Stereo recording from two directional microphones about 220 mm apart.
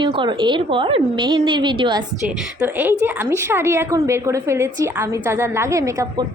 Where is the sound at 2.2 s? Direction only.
5° right (ahead or behind).